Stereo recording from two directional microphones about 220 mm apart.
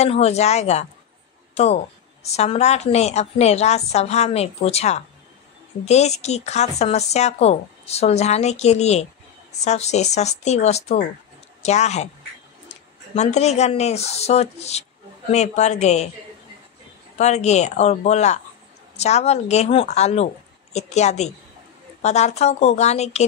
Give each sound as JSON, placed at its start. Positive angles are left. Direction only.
{"t": 0.0, "sound": "speech", "side_deg": 30}
{"t": 17.2, "sound": "speech", "side_deg": 30}